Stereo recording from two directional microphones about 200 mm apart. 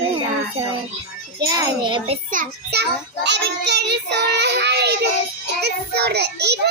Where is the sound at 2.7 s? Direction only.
55° right (ahead or behind).